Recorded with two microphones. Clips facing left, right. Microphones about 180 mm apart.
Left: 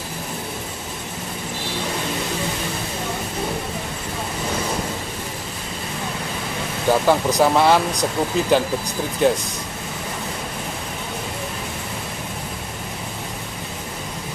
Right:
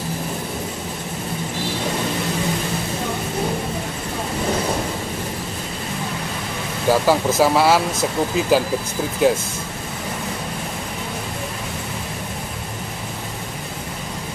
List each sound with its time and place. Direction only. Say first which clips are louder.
6.9 s speech: right 1 dB; 5° right (ahead or behind)